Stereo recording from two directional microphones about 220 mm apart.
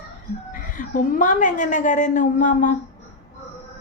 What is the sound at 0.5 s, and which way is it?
A woman's voice, 35° left (ahead or behind).